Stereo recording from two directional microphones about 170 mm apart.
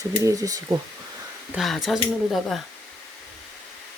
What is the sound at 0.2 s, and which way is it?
Speech, 20° right (ahead or behind).